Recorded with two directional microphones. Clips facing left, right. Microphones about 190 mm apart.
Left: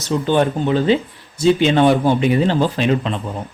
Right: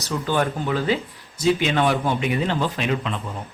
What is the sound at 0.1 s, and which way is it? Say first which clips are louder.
Speech: left 6 dB; 25° left (ahead or behind).